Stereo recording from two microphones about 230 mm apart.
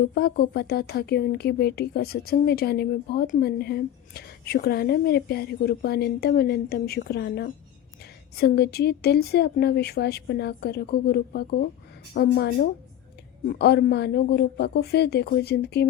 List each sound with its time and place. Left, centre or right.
0.0 s speech: left